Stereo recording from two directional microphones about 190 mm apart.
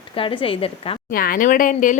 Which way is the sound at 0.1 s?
25° left (ahead or behind).